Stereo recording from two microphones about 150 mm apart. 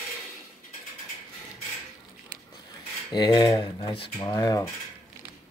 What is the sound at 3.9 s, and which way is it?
Speech, 35° left (ahead or behind).